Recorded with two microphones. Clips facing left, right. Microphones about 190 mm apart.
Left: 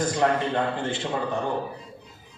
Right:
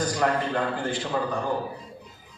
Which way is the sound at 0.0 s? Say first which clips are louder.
Left 2 dB; 25° left (ahead or behind).